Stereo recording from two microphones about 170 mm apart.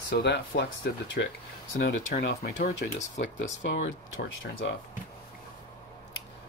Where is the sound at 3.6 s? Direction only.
90° left.